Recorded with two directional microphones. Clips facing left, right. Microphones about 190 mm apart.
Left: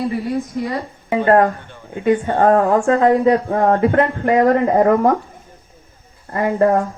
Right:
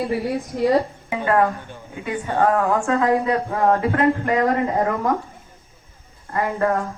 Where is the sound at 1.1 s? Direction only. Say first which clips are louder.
Left 6 dB; 50° left (ahead or behind); by 4.0 s 35° left (ahead or behind).